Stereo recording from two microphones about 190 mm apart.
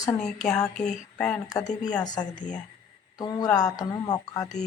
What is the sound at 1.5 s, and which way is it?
Speech, 20° left (ahead or behind).